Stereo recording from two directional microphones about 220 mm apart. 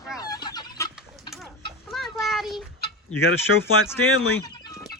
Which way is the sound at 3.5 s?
70° left (ahead or behind).